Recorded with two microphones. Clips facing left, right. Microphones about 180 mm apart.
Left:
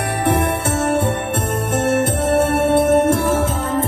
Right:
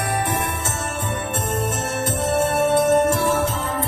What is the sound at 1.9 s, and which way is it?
Music, 55° left (ahead or behind).